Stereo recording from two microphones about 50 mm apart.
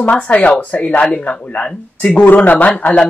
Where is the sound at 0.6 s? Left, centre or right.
Left.